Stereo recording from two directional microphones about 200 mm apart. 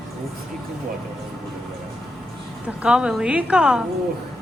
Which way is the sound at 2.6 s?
5° right (ahead or behind).